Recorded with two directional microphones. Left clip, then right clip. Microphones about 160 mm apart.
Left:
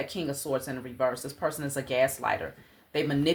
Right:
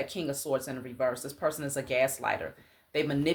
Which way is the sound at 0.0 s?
20° right (ahead or behind).